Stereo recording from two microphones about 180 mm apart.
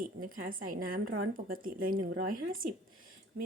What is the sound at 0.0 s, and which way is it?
Speech, 50° right (ahead or behind).